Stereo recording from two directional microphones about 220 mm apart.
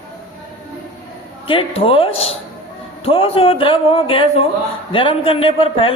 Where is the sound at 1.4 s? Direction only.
25° left (ahead or behind).